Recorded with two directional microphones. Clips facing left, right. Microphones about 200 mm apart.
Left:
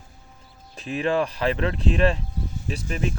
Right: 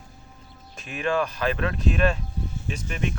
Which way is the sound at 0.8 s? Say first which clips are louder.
Left 2 dB; 35° left (ahead or behind).